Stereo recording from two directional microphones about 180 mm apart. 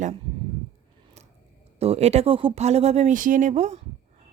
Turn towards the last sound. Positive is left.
turn(degrees=-40)  # may be behind; listen again after turning